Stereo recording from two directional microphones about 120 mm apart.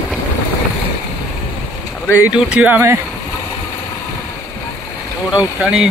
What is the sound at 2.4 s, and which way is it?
Speech, 10° right (ahead or behind).